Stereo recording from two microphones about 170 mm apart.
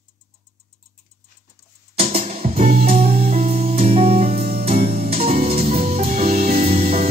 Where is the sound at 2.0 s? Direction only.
40° right (ahead or behind).